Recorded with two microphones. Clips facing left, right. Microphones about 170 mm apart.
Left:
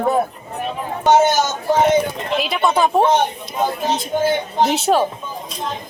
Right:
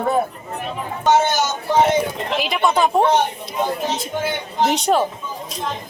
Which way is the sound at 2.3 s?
Centre (ahead or behind).